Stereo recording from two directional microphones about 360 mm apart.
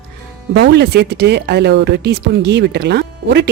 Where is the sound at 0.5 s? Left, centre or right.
Right.